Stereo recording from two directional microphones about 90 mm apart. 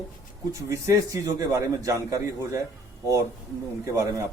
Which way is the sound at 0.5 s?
35° right (ahead or behind).